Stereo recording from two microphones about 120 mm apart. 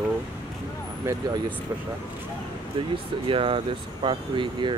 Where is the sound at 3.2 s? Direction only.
45° right (ahead or behind).